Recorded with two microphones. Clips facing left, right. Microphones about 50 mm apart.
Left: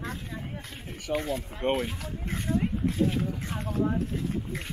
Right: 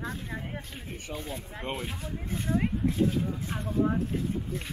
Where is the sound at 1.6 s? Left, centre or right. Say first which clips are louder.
Left 8 dB; left.